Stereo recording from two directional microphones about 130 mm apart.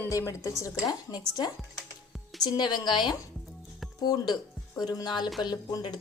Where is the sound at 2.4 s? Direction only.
35° left (ahead or behind).